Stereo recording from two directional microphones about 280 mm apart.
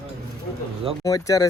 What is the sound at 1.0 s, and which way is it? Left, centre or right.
Speech, centre.